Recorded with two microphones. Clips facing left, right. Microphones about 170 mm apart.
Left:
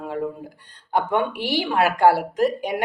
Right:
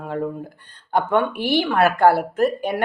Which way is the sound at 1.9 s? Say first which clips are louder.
Right 1 dB; 55° right (ahead or behind).